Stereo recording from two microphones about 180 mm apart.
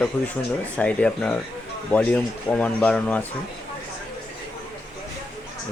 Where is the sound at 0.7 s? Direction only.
5° left (ahead or behind).